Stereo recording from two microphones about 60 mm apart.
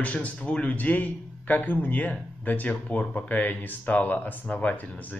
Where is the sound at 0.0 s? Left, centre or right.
Left.